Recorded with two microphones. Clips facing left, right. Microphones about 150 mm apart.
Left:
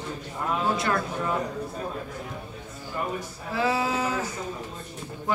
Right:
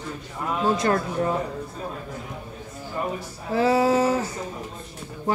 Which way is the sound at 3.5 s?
40° right (ahead or behind).